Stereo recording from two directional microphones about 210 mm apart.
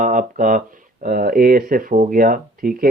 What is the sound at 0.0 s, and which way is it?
Speech, 40° right (ahead or behind).